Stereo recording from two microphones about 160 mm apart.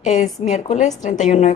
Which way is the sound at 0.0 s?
45° left (ahead or behind).